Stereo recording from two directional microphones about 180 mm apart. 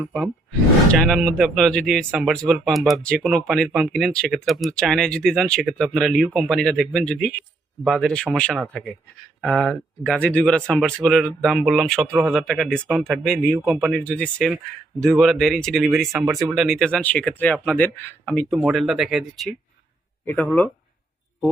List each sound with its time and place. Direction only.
0.0 s speech: 5° right (ahead or behind)
14.0 s speech: 5° left (ahead or behind)
20.2 s speech: 10° left (ahead or behind)